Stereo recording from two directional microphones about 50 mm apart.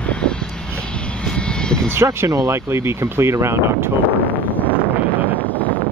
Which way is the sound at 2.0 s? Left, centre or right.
Right.